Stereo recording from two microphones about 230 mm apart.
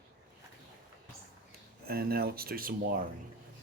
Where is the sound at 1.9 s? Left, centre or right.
Right.